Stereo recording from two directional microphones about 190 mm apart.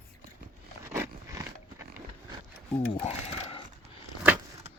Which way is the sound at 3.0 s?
35° left (ahead or behind).